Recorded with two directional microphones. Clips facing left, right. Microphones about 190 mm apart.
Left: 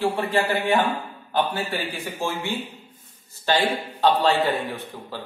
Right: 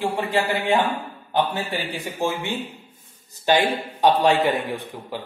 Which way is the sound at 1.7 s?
20° right (ahead or behind).